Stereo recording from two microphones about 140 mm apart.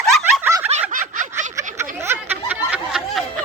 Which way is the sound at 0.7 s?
55° right (ahead or behind).